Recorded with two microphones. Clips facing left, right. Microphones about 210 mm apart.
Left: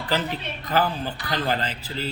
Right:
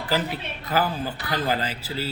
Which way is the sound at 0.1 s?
10° right (ahead or behind).